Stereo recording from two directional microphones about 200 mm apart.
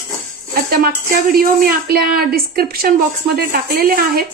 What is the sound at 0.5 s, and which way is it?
Speech, 50° right (ahead or behind).